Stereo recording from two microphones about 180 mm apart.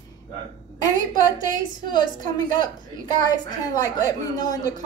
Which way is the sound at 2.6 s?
20° left (ahead or behind).